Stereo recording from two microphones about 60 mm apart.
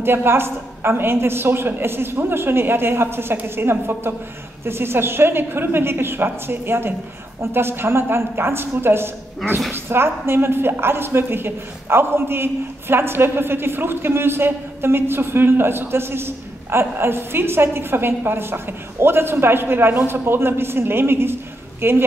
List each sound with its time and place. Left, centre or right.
0.0 s a woman's voice: right